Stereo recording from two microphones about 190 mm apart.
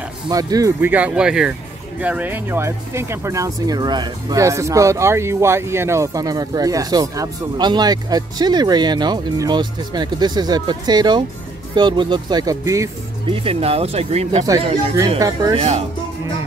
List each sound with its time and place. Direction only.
0.3 s speech: 20° right (ahead or behind)
13.3 s speech: 30° right (ahead or behind)
14.4 s speech: 20° right (ahead or behind)